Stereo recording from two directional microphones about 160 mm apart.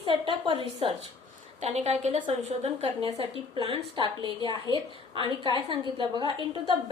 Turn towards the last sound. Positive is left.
turn(degrees=-30)  # may be behind; listen again after turning